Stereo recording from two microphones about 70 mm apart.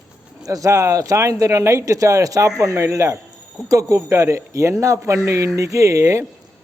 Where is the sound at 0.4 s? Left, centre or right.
Right.